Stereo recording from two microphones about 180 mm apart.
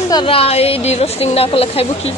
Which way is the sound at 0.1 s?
30° left (ahead or behind).